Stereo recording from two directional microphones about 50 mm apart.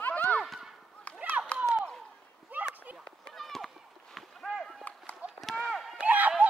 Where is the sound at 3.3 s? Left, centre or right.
Centre.